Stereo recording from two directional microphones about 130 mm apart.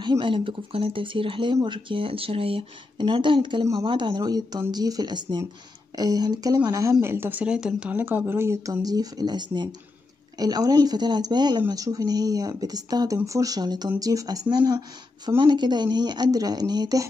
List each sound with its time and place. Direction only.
0.0 s speech: 40° right (ahead or behind)